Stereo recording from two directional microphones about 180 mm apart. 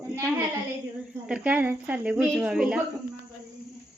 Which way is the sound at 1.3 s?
10° right (ahead or behind).